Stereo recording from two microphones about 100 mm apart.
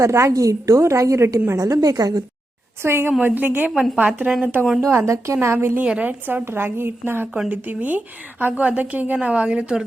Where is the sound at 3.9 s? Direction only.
15° right (ahead or behind).